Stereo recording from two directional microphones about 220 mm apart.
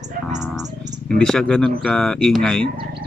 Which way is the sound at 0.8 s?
35° right (ahead or behind).